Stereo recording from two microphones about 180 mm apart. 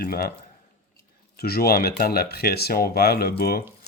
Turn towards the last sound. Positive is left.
turn(degrees=60)  # may be behind; listen again after turning